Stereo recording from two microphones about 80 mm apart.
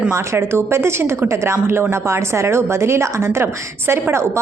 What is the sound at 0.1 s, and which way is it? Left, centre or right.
A woman's voice, right.